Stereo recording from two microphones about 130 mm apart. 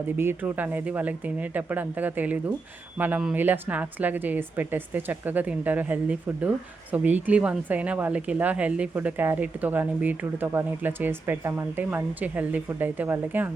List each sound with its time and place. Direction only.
0.2 s a woman's voice: 15° right (ahead or behind)